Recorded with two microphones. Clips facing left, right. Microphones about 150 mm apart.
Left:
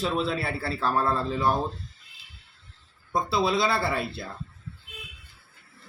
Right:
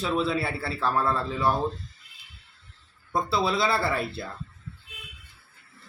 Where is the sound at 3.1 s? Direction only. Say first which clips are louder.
Left 1 dB; centre (ahead or behind).